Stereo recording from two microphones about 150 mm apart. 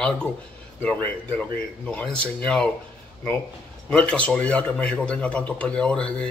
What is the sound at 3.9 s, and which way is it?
Speech, 10° left (ahead or behind).